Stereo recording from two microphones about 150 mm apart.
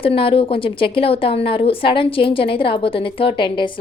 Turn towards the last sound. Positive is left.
turn(degrees=35)  # may be behind; listen again after turning